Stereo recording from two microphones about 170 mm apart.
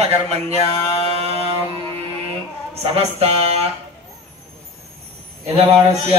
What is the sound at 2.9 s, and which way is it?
Speech, 35° right (ahead or behind).